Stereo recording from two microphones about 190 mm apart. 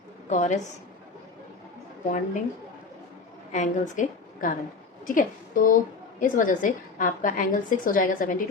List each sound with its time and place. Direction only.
0.3 s a woman's voice: 40° left (ahead or behind)
2.0 s a woman's voice: 40° left (ahead or behind)
3.5 s a woman's voice: 40° left (ahead or behind)